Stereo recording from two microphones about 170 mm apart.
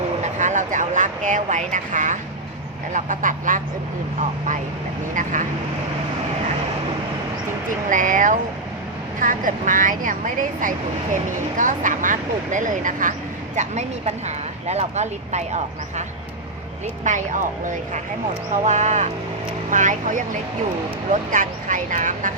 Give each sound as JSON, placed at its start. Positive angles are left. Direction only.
{"t": 0.2, "sound": "a sound", "side_deg": -45}
{"t": 2.9, "sound": "speech", "side_deg": -50}
{"t": 5.1, "sound": "speech", "side_deg": -50}
{"t": 7.9, "sound": "speech", "side_deg": -50}